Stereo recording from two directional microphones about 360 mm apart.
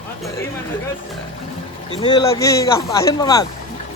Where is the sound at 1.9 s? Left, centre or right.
Centre.